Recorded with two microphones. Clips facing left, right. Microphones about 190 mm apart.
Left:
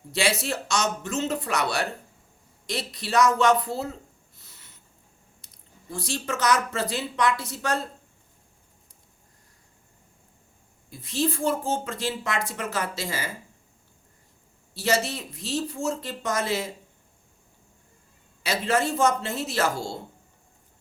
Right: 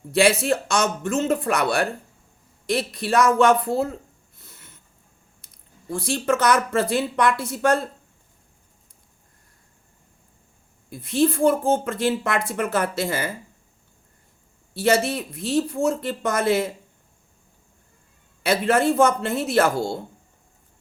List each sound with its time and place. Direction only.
0.1 s a woman's voice: 55° right (ahead or behind)
4.4 s a sound: 50° right (ahead or behind)
5.9 s a woman's voice: 55° right (ahead or behind)
10.8 s a woman's voice: 55° right (ahead or behind)
14.7 s a woman's voice: 55° right (ahead or behind)
18.4 s a woman's voice: 55° right (ahead or behind)